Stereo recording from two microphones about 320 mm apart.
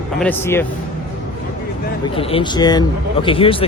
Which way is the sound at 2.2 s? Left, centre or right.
Centre.